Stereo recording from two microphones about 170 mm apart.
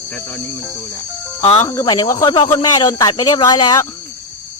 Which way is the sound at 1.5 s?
20° left (ahead or behind).